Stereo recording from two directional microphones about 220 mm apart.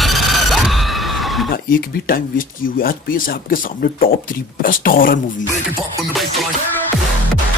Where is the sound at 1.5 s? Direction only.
40° left (ahead or behind).